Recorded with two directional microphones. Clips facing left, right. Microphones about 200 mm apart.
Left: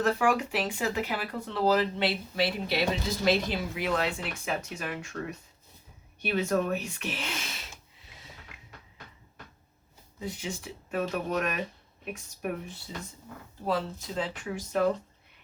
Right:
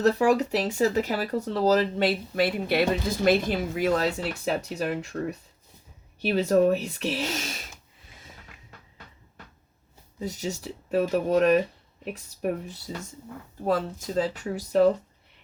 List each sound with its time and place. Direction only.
0.0 s speech: 40° right (ahead or behind)
6.2 s speech: 35° right (ahead or behind)
10.2 s speech: 40° right (ahead or behind)
12.9 s speech: 45° right (ahead or behind)